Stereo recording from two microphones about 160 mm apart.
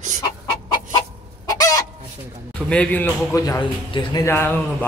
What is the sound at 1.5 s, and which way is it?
Chicken, 20° left (ahead or behind).